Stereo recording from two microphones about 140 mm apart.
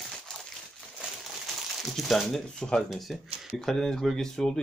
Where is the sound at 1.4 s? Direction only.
Centre (ahead or behind).